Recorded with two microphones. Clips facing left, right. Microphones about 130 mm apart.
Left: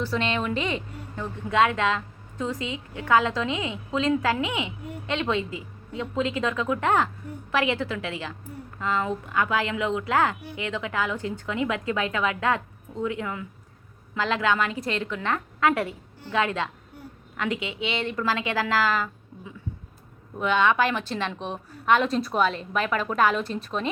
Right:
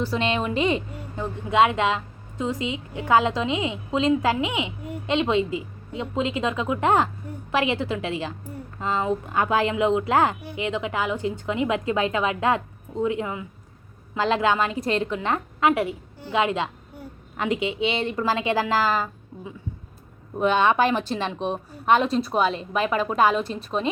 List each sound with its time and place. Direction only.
0.2 s a woman's voice: 35° right (ahead or behind)
1.2 s a woman's voice: 25° right (ahead or behind)
15.6 s a woman's voice: 15° right (ahead or behind); by 18.3 s 30° right (ahead or behind)
18.5 s a woman's voice: 15° right (ahead or behind)
18.8 s a woman's voice: 40° right (ahead or behind)
20.4 s a woman's voice: 40° right (ahead or behind)
20.9 s a woman's voice: 10° right (ahead or behind)
21.8 s a woman's voice: 30° right (ahead or behind)